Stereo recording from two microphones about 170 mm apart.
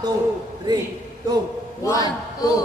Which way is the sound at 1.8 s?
20° left (ahead or behind).